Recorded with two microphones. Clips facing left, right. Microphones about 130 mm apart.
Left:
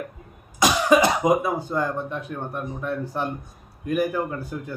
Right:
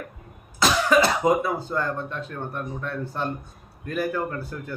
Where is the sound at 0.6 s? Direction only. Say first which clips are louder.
Left 2 dB; 15° left (ahead or behind).